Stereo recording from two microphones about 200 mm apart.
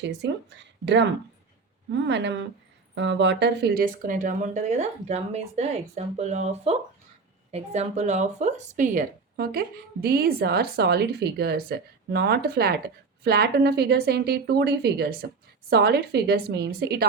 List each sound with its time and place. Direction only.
0.0 s speech: 60° right (ahead or behind)